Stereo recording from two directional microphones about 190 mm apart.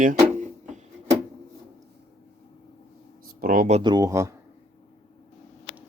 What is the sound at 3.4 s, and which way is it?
Speech, 50° right (ahead or behind).